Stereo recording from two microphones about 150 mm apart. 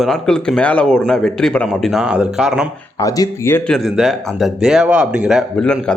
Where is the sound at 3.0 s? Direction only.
20° left (ahead or behind).